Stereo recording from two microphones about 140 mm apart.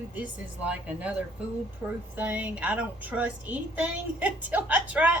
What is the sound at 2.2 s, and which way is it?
A woman's voice, 10° right (ahead or behind).